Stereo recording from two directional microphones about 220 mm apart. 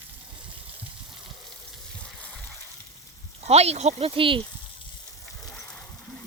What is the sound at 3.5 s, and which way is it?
Speech, 30° right (ahead or behind).